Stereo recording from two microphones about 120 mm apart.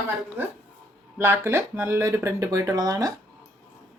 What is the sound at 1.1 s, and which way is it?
Speech, 20° right (ahead or behind).